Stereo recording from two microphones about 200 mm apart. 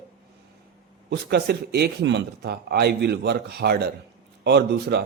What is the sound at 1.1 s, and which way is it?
Speech, 55° right (ahead or behind).